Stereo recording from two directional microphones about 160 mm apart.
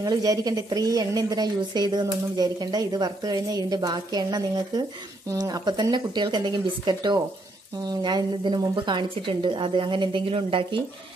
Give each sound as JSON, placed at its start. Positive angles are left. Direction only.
{"t": 0.0, "sound": "a woman's voice", "side_deg": -20}